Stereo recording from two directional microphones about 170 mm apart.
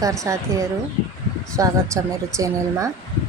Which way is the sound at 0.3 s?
15° right (ahead or behind).